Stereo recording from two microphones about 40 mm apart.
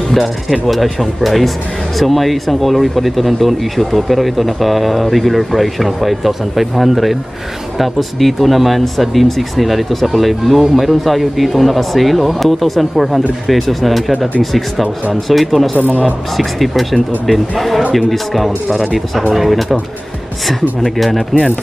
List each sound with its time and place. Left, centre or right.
0.1 s speech: centre
20.8 s speech: centre